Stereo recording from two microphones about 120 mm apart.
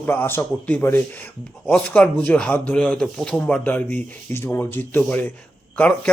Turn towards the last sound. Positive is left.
turn(degrees=10)  # may be behind; listen again after turning